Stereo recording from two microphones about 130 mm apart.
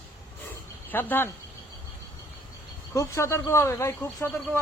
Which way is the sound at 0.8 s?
15° left (ahead or behind).